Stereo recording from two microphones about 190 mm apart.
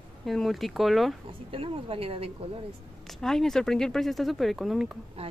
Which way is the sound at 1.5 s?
30° right (ahead or behind).